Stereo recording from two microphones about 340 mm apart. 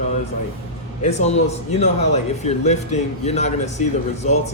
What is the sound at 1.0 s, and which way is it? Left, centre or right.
Speech, centre.